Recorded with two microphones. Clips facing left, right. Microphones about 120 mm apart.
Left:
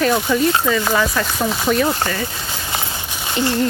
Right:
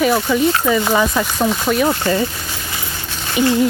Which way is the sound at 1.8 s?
25° right (ahead or behind).